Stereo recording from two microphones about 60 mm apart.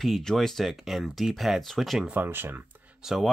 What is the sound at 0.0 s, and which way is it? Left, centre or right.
Speech, centre.